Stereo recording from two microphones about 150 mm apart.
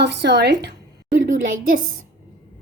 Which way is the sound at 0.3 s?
90° right.